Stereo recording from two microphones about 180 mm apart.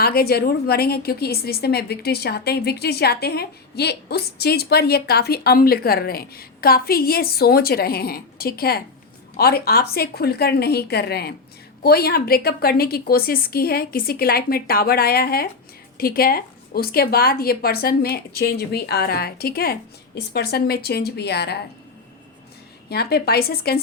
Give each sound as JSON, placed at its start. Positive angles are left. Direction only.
{"t": 0.0, "sound": "a woman's voice", "side_deg": 60}
{"t": 22.9, "sound": "a woman's voice", "side_deg": 60}